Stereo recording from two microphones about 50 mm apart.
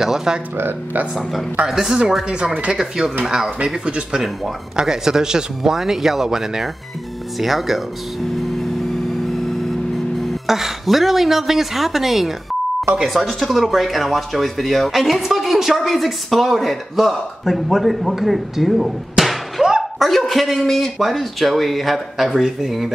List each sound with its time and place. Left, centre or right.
0.0 s speech: centre
1.7 s speech: centre
2.2 s speech: right; by 7.8 s centre
10.2 s speech: centre
19.6 s a sound: centre
20.0 s speech: centre